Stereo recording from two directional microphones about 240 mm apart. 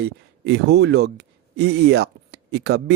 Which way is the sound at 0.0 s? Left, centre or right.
Right.